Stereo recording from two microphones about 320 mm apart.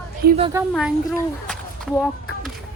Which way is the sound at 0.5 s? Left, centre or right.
Centre.